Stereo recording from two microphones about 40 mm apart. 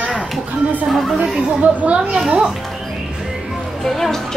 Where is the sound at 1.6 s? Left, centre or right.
Right.